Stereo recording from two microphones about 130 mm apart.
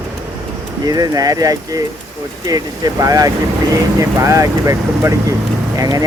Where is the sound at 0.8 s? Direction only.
30° right (ahead or behind).